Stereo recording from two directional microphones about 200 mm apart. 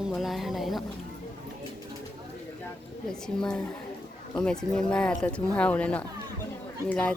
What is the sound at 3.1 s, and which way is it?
Speech, 5° left (ahead or behind).